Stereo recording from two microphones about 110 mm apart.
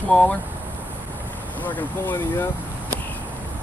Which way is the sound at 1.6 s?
15° left (ahead or behind).